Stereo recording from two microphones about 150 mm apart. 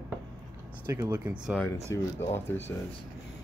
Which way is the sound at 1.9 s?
15° left (ahead or behind).